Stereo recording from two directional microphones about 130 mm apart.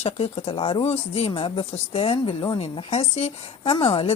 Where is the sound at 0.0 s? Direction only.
55° left (ahead or behind).